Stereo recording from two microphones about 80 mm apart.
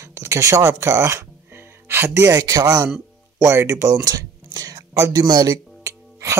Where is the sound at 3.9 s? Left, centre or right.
Right.